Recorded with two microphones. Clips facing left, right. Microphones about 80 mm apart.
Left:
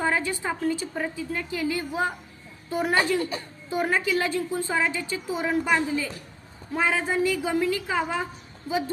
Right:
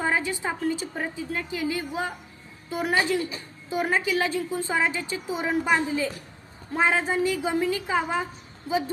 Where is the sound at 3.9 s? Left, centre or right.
Centre.